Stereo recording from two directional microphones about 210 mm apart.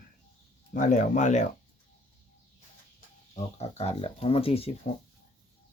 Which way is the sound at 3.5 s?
30° left (ahead or behind).